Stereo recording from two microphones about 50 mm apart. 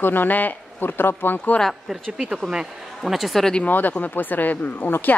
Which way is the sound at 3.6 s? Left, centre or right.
Left.